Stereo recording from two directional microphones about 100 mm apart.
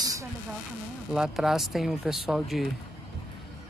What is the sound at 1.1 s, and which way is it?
Speech, 5° right (ahead or behind).